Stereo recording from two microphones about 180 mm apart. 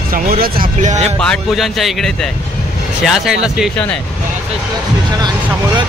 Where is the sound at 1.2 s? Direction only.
Centre (ahead or behind).